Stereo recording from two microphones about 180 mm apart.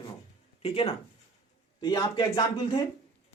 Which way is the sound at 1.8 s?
20° left (ahead or behind).